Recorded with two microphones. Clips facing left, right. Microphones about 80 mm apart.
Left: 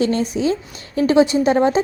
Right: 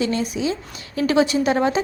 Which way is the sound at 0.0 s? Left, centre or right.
Left.